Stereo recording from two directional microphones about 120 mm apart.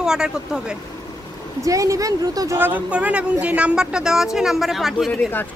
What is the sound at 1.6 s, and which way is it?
Speech, 25° right (ahead or behind).